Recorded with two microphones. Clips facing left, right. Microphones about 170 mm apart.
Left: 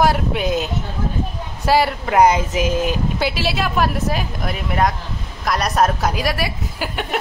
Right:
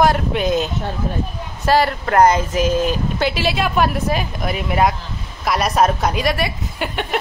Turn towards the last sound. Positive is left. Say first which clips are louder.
# right 1 dB
turn(degrees=0)  # may be behind; listen again after turning